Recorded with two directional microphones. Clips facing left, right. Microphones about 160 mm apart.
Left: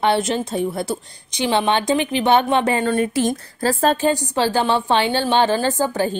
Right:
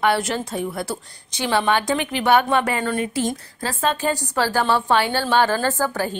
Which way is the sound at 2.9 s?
45° left (ahead or behind).